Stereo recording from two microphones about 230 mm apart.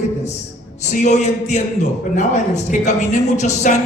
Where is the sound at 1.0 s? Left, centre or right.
Left.